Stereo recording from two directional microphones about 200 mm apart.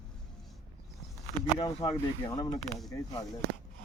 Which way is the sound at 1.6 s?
20° left (ahead or behind).